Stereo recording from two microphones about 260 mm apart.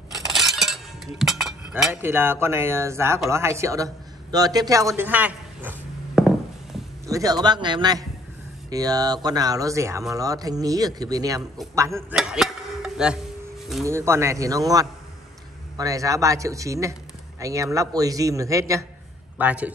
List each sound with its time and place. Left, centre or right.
0.3 s chink: centre
7.1 s speech: centre